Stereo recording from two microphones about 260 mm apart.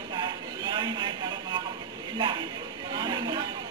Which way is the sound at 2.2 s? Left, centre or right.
Centre.